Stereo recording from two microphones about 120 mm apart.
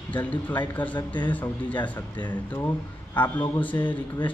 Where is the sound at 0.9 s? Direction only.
40° left (ahead or behind).